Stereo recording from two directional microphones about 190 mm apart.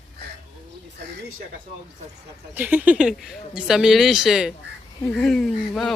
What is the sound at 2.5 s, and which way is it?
Speech, 10° right (ahead or behind).